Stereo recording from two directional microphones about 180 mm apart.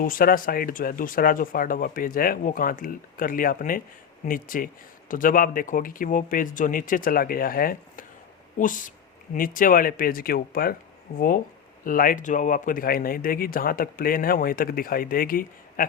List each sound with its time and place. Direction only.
0.0 s speech: 50° left (ahead or behind)
11.9 s speech: 50° left (ahead or behind)